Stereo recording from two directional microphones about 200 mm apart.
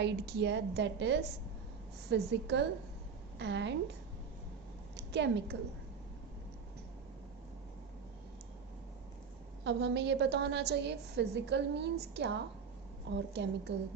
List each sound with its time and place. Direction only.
0.0 s a woman's voice: 60° right (ahead or behind)
4.9 s a woman's voice: 60° right (ahead or behind)
9.6 s a woman's voice: 60° right (ahead or behind)